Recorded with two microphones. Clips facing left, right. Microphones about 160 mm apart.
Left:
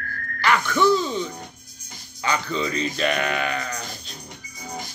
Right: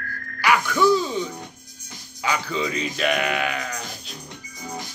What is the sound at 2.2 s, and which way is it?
Speech, 5° right (ahead or behind).